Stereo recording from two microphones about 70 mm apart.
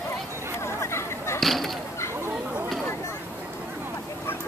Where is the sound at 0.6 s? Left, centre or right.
Left.